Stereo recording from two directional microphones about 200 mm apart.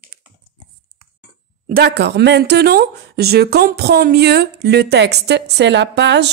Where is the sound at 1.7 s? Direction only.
55° right (ahead or behind).